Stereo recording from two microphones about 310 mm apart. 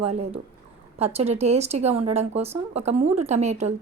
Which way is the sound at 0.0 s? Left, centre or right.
Centre.